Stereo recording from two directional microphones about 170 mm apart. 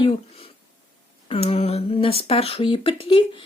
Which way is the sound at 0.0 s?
35° left (ahead or behind).